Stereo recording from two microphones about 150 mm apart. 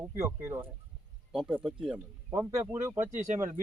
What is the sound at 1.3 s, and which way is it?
Speech, 5° right (ahead or behind).